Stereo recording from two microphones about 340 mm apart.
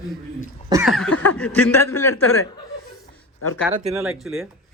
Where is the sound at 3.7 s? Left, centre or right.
Centre.